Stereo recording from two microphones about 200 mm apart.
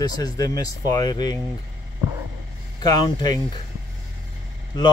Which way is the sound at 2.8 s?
20° left (ahead or behind).